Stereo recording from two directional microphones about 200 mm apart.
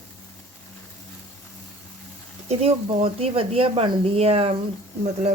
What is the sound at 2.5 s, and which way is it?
Speech, 30° right (ahead or behind).